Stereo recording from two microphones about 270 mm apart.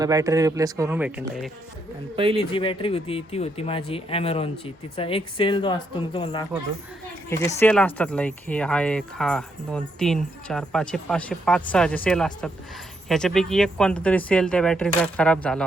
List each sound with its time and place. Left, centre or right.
0.0 s speech: centre
2.4 s speech: centre